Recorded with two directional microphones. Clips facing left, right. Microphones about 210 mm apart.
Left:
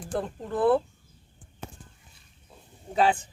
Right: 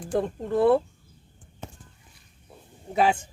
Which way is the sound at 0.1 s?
10° right (ahead or behind).